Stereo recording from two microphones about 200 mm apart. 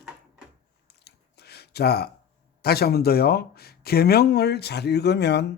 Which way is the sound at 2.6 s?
50° left (ahead or behind).